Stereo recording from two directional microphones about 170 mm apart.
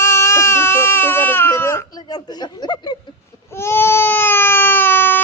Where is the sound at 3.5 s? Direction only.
15° left (ahead or behind).